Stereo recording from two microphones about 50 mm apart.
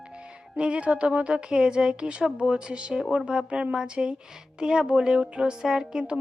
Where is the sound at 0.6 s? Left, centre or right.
Right.